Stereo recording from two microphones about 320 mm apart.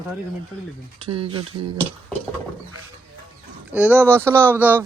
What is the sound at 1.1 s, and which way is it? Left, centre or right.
Speech, centre.